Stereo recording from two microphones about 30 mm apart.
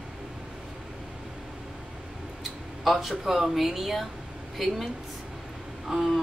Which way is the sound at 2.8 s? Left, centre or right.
Centre.